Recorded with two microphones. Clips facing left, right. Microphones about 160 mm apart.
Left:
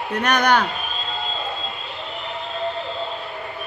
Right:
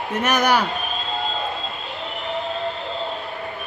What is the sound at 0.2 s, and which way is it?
Speech, 5° right (ahead or behind).